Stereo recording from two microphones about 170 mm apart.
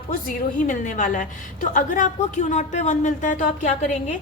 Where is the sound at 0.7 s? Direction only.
50° left (ahead or behind).